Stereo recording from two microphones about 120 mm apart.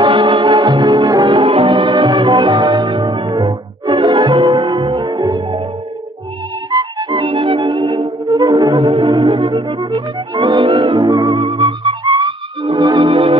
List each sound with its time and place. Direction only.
0.0 s music: 45° right (ahead or behind)
6.7 s music: 35° right (ahead or behind)